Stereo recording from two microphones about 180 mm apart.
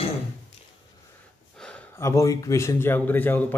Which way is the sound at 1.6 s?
5° left (ahead or behind).